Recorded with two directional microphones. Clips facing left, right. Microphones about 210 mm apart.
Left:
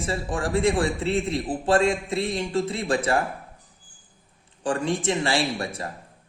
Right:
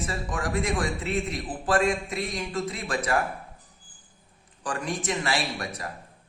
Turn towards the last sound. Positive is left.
turn(degrees=30)  # may be behind; listen again after turning